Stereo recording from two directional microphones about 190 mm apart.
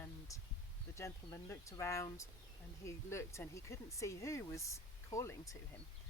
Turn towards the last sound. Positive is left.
turn(degrees=15)  # may be behind; listen again after turning